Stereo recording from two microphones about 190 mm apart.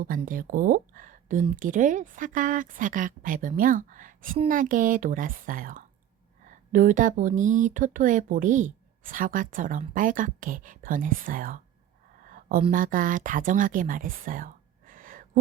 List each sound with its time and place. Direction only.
0.3 s speech: 45° right (ahead or behind)
12.3 s a sound: 50° right (ahead or behind)
12.7 s speech: 45° right (ahead or behind)